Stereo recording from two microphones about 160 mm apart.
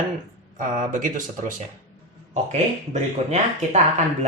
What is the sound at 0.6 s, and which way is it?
Speech, 55° right (ahead or behind).